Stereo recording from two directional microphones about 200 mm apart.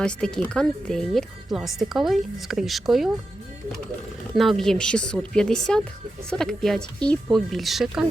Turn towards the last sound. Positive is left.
turn(degrees=0)  # may be behind; listen again after turning